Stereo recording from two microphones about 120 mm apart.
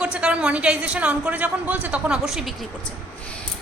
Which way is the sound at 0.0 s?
10° right (ahead or behind).